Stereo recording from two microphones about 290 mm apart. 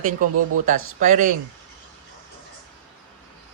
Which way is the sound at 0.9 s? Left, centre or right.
Right.